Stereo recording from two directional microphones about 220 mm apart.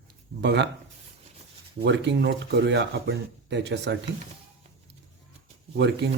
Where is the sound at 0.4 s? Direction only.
50° right (ahead or behind).